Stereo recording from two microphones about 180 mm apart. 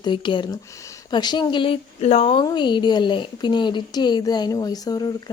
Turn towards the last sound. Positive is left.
turn(degrees=20)  # may be behind; listen again after turning